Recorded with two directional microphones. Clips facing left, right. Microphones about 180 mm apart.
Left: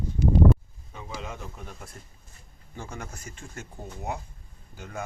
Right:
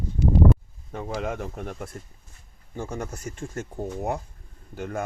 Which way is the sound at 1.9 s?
45° right (ahead or behind).